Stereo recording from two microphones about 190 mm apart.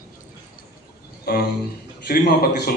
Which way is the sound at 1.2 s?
55° left (ahead or behind).